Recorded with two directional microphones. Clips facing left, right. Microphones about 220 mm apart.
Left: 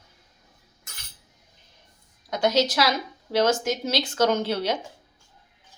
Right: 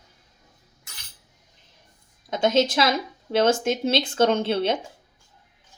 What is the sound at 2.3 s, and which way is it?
Speech, 25° right (ahead or behind).